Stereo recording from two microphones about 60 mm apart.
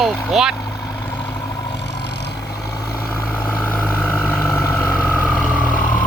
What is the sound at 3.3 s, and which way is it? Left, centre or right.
Vehicle, left.